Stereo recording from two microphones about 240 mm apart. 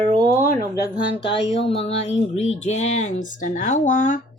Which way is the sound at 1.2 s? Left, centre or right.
Left.